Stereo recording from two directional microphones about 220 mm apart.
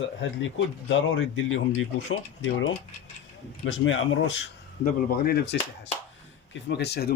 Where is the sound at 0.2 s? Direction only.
55° left (ahead or behind).